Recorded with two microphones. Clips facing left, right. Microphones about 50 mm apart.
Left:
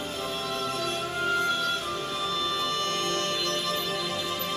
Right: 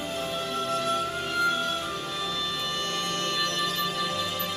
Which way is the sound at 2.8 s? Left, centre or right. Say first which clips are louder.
Left 1 dB; centre.